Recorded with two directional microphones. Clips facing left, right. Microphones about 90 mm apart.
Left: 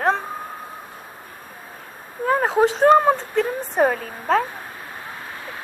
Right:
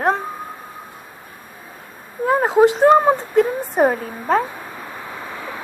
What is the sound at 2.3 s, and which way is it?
Speech, 10° right (ahead or behind).